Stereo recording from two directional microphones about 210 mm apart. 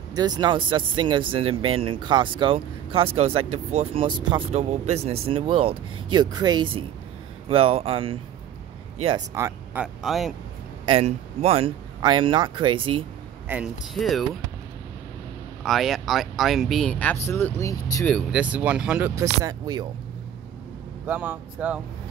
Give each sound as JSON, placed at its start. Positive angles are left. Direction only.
{"t": 0.1, "sound": "speech", "side_deg": -20}
{"t": 9.3, "sound": "speech", "side_deg": -15}
{"t": 10.0, "sound": "speech", "side_deg": 0}
{"t": 10.9, "sound": "speech", "side_deg": -30}
{"t": 13.5, "sound": "speech", "side_deg": -5}
{"t": 15.6, "sound": "speech", "side_deg": 0}
{"t": 18.1, "sound": "speech", "side_deg": -5}
{"t": 19.4, "sound": "speech", "side_deg": -20}
{"t": 21.1, "sound": "speech", "side_deg": -5}